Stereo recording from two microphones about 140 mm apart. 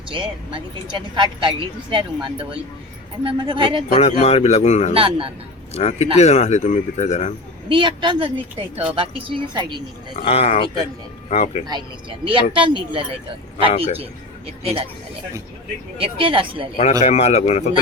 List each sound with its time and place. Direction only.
0.1 s speech: 35° right (ahead or behind)
3.9 s a man's voice: 50° left (ahead or behind)
4.9 s speech: 40° right (ahead or behind)
5.7 s a man's voice: 50° left (ahead or behind)
7.7 s speech: 35° right (ahead or behind)
10.2 s a man's voice: 50° left (ahead or behind)
11.6 s speech: 35° right (ahead or behind)
16.0 s speech: 40° right (ahead or behind)
17.0 s a man's voice: 50° left (ahead or behind)